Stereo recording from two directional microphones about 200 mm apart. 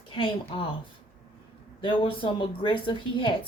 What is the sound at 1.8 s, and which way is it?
Speech, 25° left (ahead or behind).